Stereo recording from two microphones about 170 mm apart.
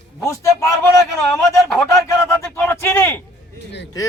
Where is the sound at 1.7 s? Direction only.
Centre (ahead or behind).